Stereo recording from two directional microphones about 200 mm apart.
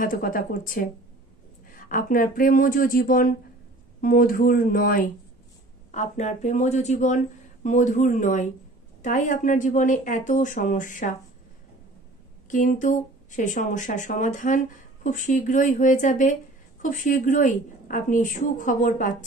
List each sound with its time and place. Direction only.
0.0 s a woman's voice: 45° left (ahead or behind)
12.4 s a woman's voice: 40° left (ahead or behind)